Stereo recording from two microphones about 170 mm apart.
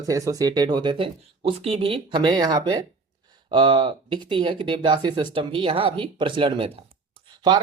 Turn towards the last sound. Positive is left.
turn(degrees=-25)  # may be behind; listen again after turning